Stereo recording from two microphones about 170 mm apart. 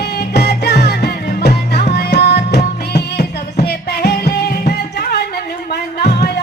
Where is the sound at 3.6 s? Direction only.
70° left (ahead or behind).